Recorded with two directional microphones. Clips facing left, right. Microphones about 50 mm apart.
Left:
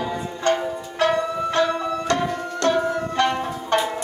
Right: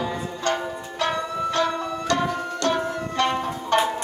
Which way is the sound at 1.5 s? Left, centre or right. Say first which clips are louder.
Left 2 dB; left.